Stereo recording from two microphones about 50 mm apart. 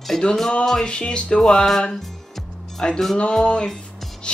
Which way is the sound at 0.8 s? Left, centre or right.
Left.